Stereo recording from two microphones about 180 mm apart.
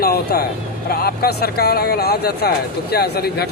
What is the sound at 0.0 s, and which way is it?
Speech, 60° left (ahead or behind).